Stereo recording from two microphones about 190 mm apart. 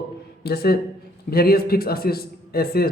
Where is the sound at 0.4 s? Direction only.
55° left (ahead or behind).